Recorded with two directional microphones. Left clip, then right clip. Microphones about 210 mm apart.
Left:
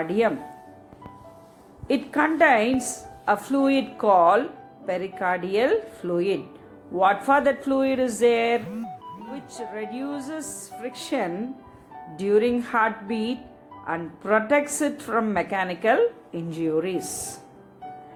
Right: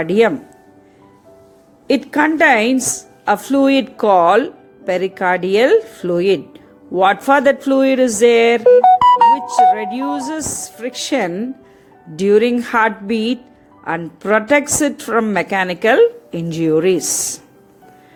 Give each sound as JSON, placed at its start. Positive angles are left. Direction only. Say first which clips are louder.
{"t": 0.0, "sound": "speech", "louder": "right 9 dB", "side_deg": -45}
{"t": 1.9, "sound": "speech", "louder": "right 8 dB", "side_deg": -45}